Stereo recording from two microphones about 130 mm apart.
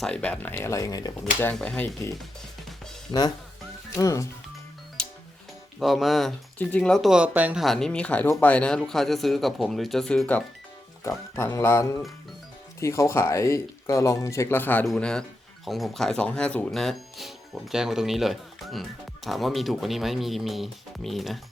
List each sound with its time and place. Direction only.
0.0 s speech: 10° left (ahead or behind); by 1.1 s 30° left (ahead or behind)
1.5 s speech: 10° left (ahead or behind)
3.1 s speech: 30° left (ahead or behind)
5.8 s speech: centre (ahead or behind)
7.6 s speech: 5° left (ahead or behind)
14.8 s speech: 5° left (ahead or behind)